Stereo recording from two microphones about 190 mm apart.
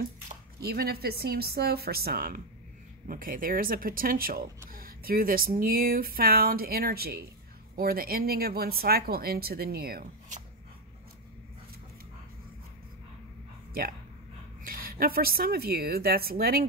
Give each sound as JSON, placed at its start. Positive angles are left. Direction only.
{"t": 0.3, "sound": "speech", "side_deg": -55}
{"t": 14.6, "sound": "speech", "side_deg": -50}